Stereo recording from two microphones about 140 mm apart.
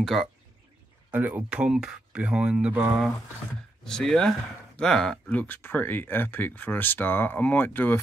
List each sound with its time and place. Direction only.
0.0 s speech: centre (ahead or behind)
1.1 s speech: 10° right (ahead or behind)
3.8 s speech: 5° left (ahead or behind)